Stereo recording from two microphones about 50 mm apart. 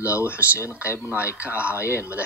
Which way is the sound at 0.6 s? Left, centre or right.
Left.